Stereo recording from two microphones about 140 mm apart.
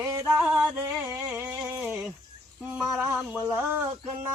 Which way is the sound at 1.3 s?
10° right (ahead or behind).